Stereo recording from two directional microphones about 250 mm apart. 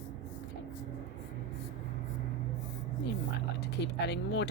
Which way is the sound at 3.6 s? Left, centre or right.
Left.